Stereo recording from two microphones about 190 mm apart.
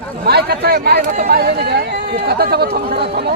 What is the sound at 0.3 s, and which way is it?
Speech, 60° right (ahead or behind).